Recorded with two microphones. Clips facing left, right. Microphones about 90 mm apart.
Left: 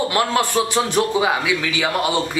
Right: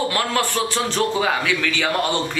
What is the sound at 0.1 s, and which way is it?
Speech, 20° left (ahead or behind).